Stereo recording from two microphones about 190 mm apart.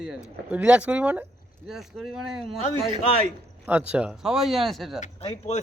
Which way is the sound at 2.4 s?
25° right (ahead or behind).